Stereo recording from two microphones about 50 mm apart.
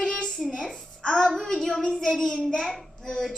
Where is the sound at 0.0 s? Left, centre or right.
Centre.